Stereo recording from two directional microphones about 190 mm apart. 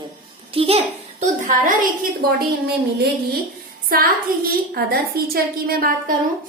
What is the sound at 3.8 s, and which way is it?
A woman's voice, 50° right (ahead or behind).